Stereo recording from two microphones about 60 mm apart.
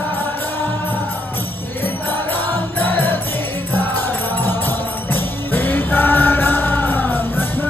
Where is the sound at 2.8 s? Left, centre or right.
Left.